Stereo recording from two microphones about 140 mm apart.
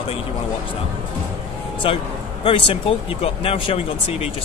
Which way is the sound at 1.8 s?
40° left (ahead or behind).